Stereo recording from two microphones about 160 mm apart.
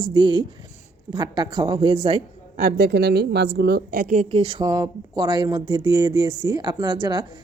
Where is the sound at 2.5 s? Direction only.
85° right; by 4.3 s 55° right (ahead or behind).